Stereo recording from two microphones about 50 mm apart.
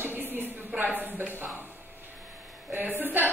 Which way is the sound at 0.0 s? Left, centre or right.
Right.